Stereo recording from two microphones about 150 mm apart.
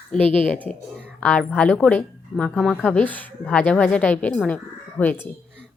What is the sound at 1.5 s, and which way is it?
A woman's voice, 10° left (ahead or behind).